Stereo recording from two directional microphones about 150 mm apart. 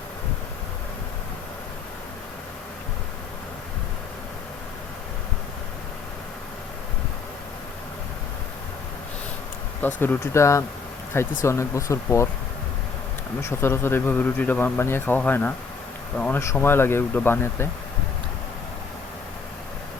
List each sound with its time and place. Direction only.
9.8 s speech: 15° left (ahead or behind)
13.4 s speech: 15° left (ahead or behind)